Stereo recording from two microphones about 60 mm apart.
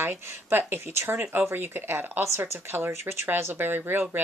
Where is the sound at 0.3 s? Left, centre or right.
Right.